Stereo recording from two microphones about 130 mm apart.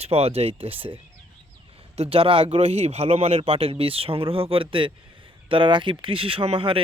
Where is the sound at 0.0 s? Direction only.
50° right (ahead or behind).